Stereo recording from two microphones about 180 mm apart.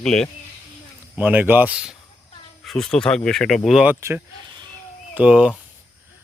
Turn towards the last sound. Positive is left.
turn(degrees=-5)  # may be behind; listen again after turning